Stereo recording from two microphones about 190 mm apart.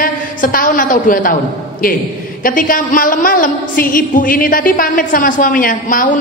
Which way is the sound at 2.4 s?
45° left (ahead or behind).